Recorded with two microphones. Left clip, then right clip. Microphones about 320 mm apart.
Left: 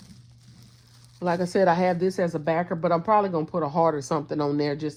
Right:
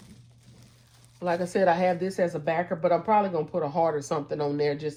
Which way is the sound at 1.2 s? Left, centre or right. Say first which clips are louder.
Left 2 dB; left.